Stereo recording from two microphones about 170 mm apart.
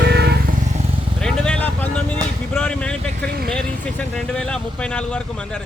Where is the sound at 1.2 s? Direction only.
5° left (ahead or behind).